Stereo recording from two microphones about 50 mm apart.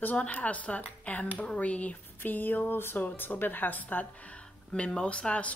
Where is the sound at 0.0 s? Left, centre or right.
Left.